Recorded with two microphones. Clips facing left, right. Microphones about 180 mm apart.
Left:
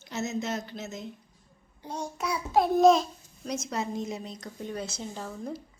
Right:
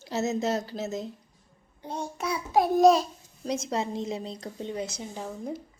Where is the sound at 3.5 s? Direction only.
25° right (ahead or behind).